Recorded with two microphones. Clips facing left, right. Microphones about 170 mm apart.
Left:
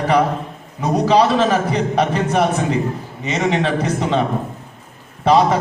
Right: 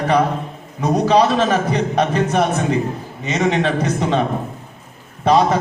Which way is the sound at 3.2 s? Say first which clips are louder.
Right 1 dB; 30° left (ahead or behind).